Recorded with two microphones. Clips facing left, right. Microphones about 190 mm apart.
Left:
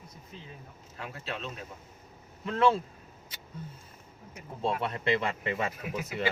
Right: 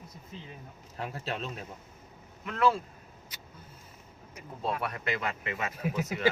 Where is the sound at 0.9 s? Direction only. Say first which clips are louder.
Right 3 dB; 35° right (ahead or behind).